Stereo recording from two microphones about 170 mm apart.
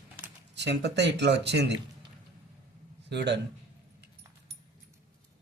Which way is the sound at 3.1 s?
90° right.